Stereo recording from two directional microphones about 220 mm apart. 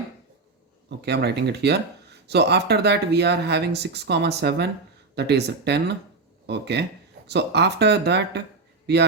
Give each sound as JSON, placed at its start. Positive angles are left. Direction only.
{"t": 0.9, "sound": "speech", "side_deg": -50}